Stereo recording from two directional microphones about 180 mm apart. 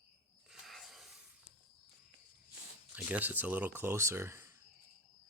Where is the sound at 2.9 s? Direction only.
10° right (ahead or behind).